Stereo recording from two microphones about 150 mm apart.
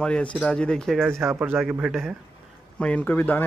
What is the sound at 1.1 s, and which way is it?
Speech, 15° right (ahead or behind).